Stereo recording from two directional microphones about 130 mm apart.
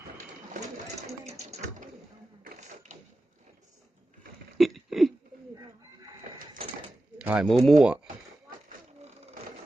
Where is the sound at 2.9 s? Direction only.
60° right (ahead or behind).